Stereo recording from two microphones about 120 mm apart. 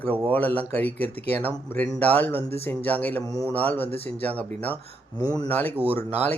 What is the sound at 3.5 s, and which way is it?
Speech, 15° left (ahead or behind).